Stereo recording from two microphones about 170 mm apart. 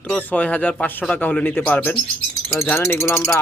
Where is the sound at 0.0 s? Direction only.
10° left (ahead or behind).